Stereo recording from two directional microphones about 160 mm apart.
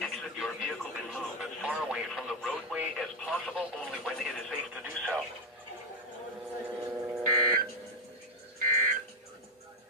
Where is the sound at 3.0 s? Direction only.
10° left (ahead or behind).